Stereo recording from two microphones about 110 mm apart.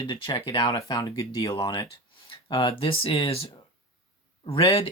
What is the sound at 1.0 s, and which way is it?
Speech, 30° left (ahead or behind).